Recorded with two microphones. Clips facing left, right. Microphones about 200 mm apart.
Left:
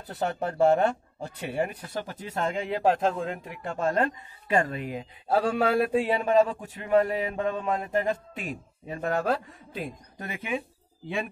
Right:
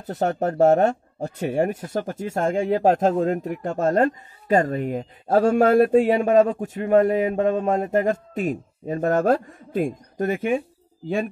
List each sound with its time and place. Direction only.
0.0 s speech: 45° right (ahead or behind)